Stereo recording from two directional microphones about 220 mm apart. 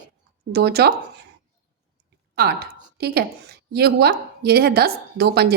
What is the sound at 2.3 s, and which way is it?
A woman's voice, 45° right (ahead or behind).